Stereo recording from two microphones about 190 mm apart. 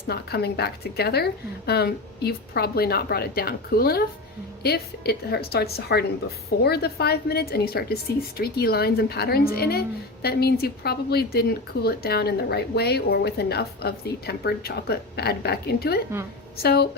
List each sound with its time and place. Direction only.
0.1 s speech: 55° left (ahead or behind)